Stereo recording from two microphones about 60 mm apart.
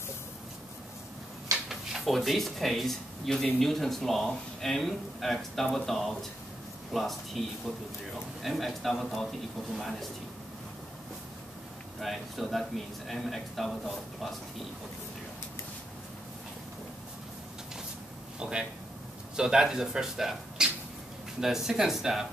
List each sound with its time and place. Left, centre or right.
1.7 s speech: centre
12.0 s speech: centre
18.4 s speech: centre